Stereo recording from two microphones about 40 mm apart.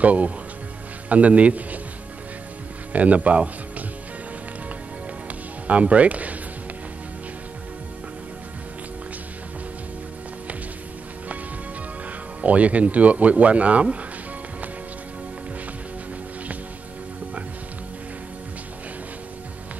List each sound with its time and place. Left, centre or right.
0.0 s a man's voice: right
2.9 s speech: right
5.7 s speech: right
12.4 s speech: right